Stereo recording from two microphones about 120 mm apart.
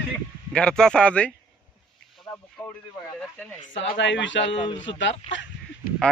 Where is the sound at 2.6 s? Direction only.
10° left (ahead or behind).